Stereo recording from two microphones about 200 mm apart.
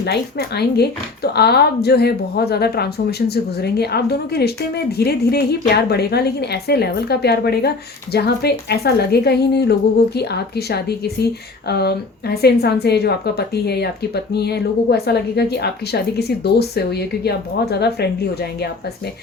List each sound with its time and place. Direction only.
0.0 s a woman's voice: 55° left (ahead or behind)